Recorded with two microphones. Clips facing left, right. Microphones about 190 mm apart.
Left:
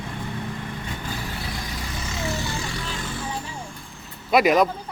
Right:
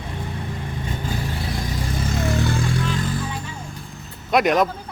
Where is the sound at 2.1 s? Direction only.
55° right (ahead or behind).